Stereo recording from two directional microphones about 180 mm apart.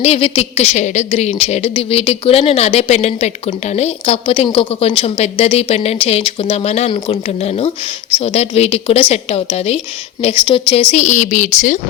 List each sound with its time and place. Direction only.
0.0 s a woman's voice: 35° left (ahead or behind)
10.9 s a woman's voice: 40° left (ahead or behind)